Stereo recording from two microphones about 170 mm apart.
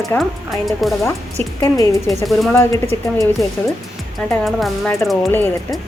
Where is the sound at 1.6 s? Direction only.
15° left (ahead or behind).